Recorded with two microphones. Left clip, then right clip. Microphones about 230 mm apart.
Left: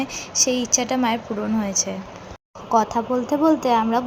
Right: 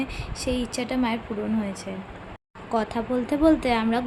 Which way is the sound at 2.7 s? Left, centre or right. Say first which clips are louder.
Left 6 dB; centre.